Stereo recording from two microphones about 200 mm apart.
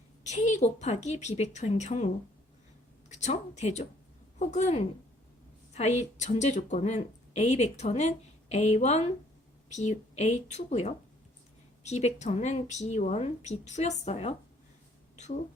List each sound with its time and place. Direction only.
0.3 s speech: 35° left (ahead or behind)
3.1 s a woman's voice: 35° left (ahead or behind)